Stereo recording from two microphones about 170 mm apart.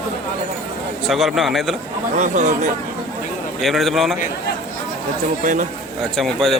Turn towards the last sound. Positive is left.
turn(degrees=0)  # may be behind; listen again after turning